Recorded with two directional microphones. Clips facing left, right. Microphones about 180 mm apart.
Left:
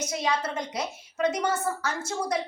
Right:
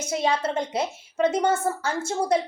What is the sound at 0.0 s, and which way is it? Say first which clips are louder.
A woman's voice: right 4 dB; 30° right (ahead or behind).